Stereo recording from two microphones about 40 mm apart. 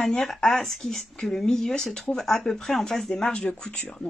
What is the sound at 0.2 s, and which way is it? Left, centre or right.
Speech, centre.